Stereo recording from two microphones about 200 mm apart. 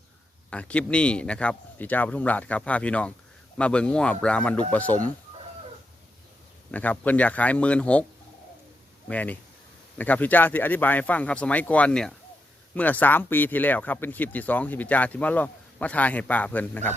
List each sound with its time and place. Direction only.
0.5 s speech: 5° left (ahead or behind)
6.7 s speech: 5° left (ahead or behind)
9.0 s speech: 10° left (ahead or behind)